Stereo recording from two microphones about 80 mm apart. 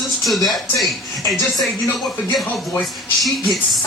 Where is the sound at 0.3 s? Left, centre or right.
Centre.